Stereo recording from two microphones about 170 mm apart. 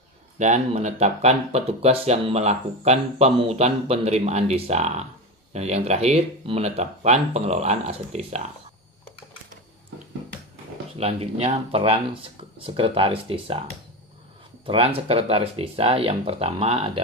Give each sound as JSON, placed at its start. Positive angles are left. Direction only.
{"t": 0.4, "sound": "speech", "side_deg": -45}
{"t": 11.0, "sound": "speech", "side_deg": -35}
{"t": 14.7, "sound": "speech", "side_deg": -35}